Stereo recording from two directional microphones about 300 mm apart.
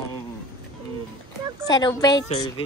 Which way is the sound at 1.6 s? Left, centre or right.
Centre.